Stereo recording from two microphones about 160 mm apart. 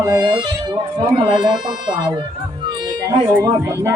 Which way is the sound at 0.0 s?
25° right (ahead or behind).